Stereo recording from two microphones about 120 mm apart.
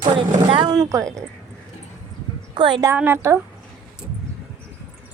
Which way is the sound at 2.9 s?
15° right (ahead or behind).